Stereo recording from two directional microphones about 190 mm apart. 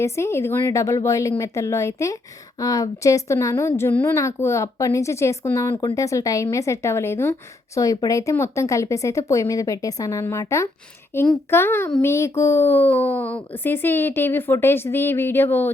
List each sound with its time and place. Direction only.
0.0 s a woman's voice: 15° left (ahead or behind)